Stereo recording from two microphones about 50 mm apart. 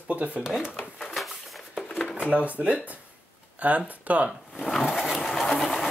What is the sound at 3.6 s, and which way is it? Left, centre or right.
Speech, right.